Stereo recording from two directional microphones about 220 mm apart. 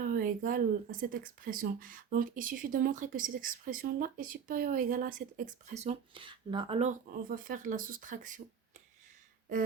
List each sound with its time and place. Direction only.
0.0 s speech: 40° right (ahead or behind)